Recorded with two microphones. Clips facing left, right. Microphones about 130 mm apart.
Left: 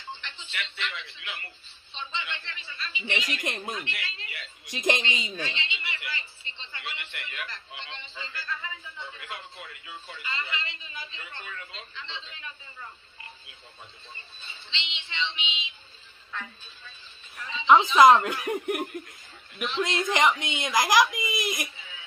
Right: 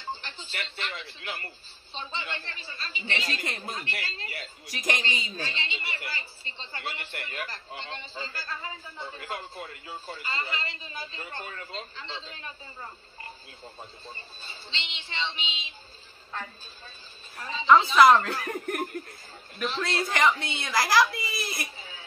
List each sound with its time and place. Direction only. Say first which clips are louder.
0.1 s a woman's voice: right 2 dB; 35° right (ahead or behind)
3.4 s a woman's voice: left 2 dB; 20° left (ahead or behind)
3.7 s a woman's voice: even; 40° right (ahead or behind)
4.6 s a woman's voice: left 4 dB; 25° left (ahead or behind)
5.3 s a woman's voice: left 1 dB; 40° right (ahead or behind)
17.9 s a woman's voice: left 1 dB; 20° left (ahead or behind)
20.1 s a woman's voice: even; 20° left (ahead or behind)
21.7 s a sound: right 3 dB; 35° right (ahead or behind)